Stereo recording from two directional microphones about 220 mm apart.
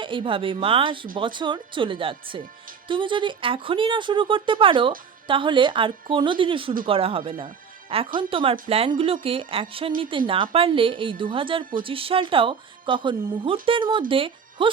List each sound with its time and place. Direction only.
0.0 s speech: 20° right (ahead or behind)